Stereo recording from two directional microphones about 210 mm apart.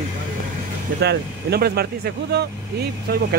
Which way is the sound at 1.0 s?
50° right (ahead or behind).